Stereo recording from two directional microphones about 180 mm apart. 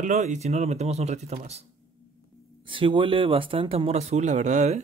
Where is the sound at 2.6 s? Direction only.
30° right (ahead or behind).